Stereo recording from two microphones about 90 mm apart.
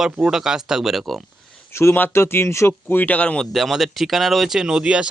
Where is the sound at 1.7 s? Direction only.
30° left (ahead or behind); by 3.5 s 10° left (ahead or behind).